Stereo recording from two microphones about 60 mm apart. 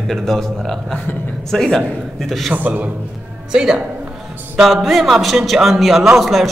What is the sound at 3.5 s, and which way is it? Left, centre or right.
A man's voice, centre.